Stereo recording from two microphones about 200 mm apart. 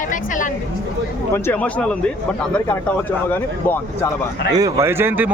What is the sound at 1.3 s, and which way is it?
A man's voice, 10° left (ahead or behind).